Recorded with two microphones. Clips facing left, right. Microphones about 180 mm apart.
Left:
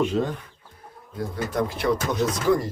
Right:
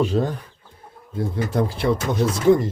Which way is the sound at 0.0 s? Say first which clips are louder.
Right 2 dB; 35° right (ahead or behind).